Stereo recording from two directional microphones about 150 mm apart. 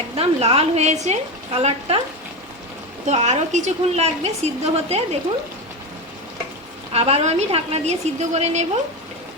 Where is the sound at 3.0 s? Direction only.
50° right (ahead or behind).